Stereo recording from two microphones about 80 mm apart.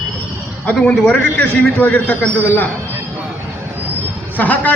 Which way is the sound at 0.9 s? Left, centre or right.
Centre.